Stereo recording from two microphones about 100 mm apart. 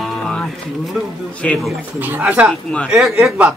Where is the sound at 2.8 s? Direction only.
5° right (ahead or behind).